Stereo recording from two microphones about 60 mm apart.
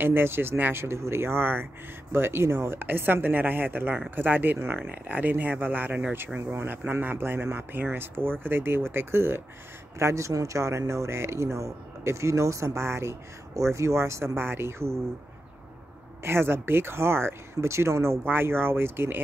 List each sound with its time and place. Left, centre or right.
0.0 s speech: right
9.9 s speech: right
16.3 s speech: right
18.2 s speech: right